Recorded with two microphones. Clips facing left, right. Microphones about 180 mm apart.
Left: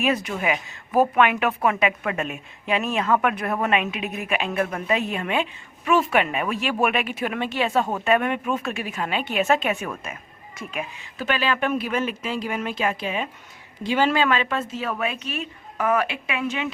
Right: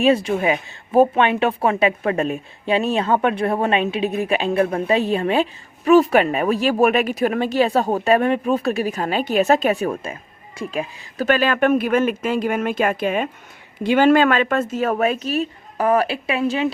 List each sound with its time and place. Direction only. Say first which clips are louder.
0.0 s a woman's voice: right 7 dB; 30° right (ahead or behind)
11.3 s a woman's voice: right 7 dB; 50° right (ahead or behind)